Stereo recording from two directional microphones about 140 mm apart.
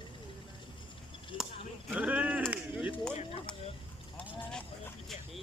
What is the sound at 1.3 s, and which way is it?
Chop, 35° left (ahead or behind).